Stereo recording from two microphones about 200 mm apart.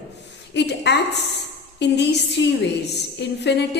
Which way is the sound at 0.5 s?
60° left (ahead or behind).